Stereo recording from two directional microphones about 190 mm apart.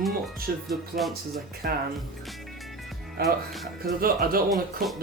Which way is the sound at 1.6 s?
50° right (ahead or behind).